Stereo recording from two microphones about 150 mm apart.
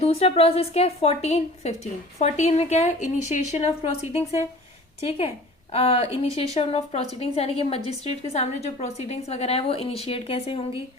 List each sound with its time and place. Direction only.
0.0 s a woman's voice: 45° left (ahead or behind)